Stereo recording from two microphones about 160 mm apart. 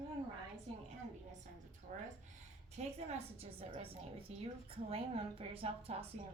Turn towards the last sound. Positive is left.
turn(degrees=-40)  # may be behind; listen again after turning